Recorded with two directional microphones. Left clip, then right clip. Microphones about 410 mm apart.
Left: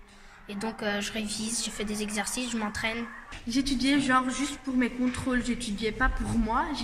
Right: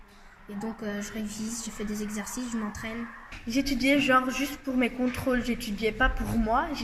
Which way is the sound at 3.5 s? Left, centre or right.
Centre.